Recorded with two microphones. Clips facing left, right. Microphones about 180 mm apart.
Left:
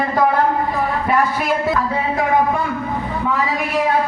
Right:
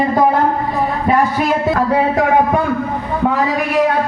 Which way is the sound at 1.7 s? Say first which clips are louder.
Right 5 dB; 60° right (ahead or behind).